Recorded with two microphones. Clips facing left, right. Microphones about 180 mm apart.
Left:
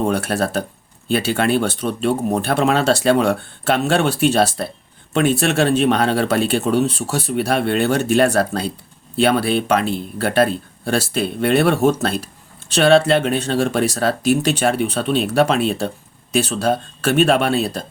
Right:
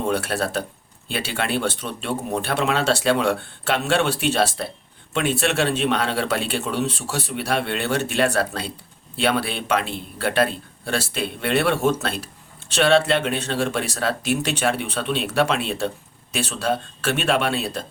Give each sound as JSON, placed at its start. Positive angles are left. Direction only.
{"t": 0.0, "sound": "speech", "side_deg": 45}